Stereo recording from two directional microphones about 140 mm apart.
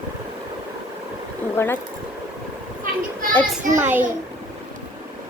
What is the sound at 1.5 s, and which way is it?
Speech, 15° left (ahead or behind).